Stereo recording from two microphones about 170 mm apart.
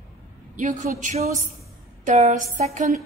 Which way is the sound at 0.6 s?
50° right (ahead or behind).